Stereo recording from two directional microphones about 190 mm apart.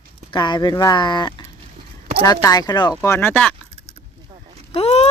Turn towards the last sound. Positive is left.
turn(degrees=35)  # may be behind; listen again after turning